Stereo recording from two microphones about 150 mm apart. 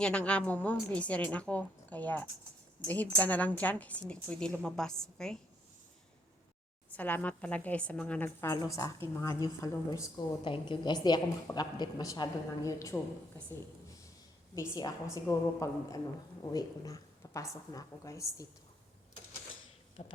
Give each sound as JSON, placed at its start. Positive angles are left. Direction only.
{"t": 0.0, "sound": "a woman's voice", "side_deg": 10}
{"t": 6.9, "sound": "a woman's voice", "side_deg": 10}
{"t": 14.5, "sound": "a woman's voice", "side_deg": 25}
{"t": 20.0, "sound": "a sound", "side_deg": 45}